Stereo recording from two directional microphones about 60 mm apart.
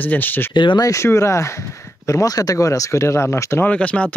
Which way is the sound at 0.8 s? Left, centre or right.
Left.